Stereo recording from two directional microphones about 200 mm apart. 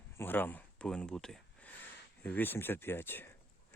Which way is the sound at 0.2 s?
10° left (ahead or behind).